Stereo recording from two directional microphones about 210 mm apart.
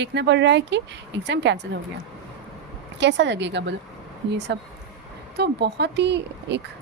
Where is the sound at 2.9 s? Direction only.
55° right (ahead or behind).